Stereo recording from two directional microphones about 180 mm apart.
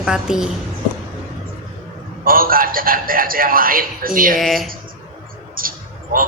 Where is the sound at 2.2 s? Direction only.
55° right (ahead or behind).